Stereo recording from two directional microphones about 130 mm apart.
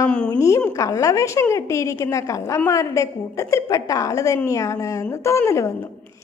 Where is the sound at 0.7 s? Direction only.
25° left (ahead or behind).